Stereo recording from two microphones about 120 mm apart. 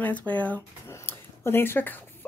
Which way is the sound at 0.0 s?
15° left (ahead or behind).